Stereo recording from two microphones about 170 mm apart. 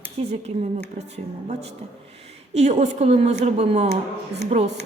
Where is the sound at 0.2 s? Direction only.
35° right (ahead or behind).